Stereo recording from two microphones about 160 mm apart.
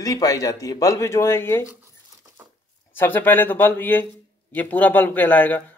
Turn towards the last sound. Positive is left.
turn(degrees=10)  # may be behind; listen again after turning